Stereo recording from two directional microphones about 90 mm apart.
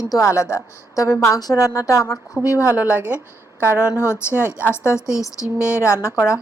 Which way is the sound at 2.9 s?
15° right (ahead or behind).